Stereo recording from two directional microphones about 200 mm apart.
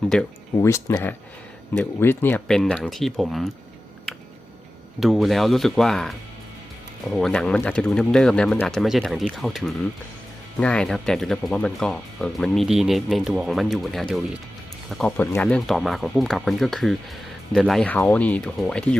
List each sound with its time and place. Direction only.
0.5 s speech: 15° left (ahead or behind)
4.9 s speech: centre (ahead or behind)